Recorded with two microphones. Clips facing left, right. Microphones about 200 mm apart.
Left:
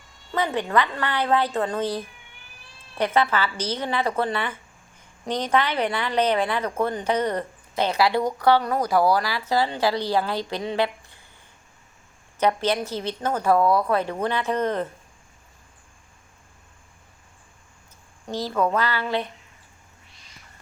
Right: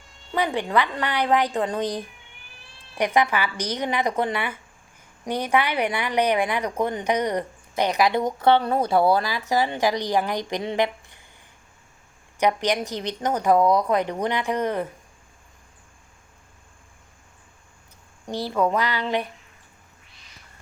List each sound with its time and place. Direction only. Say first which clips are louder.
0.3 s a woman's voice: even; 15° right (ahead or behind)
12.4 s a woman's voice: even; 15° right (ahead or behind)
18.3 s a woman's voice: right 1 dB; 15° right (ahead or behind)